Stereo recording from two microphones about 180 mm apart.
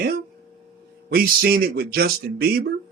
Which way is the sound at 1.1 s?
55° right (ahead or behind).